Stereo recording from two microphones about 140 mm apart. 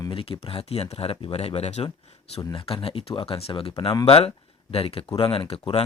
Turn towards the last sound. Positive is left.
turn(degrees=40)  # may be behind; listen again after turning